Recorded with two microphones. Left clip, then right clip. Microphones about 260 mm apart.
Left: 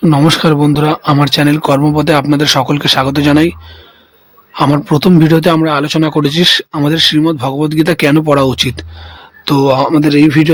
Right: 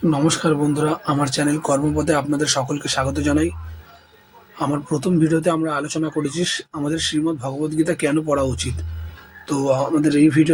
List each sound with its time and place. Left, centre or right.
0.1 s speech: left
4.5 s speech: left